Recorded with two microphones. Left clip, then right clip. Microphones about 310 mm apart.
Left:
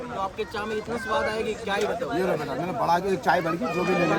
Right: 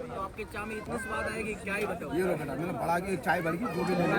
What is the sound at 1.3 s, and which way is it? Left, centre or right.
Speech, centre.